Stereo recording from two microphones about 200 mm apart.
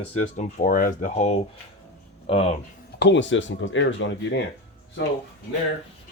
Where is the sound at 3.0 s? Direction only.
65° left (ahead or behind).